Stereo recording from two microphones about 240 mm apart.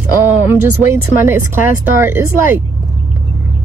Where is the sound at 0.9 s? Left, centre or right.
Centre.